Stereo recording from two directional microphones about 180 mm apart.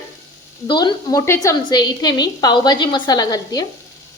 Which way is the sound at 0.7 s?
25° left (ahead or behind).